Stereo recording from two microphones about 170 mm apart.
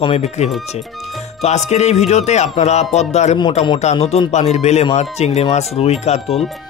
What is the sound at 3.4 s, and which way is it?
Speech, 30° left (ahead or behind).